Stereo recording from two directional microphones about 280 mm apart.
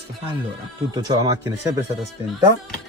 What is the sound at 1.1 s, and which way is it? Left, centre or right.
Speech, centre.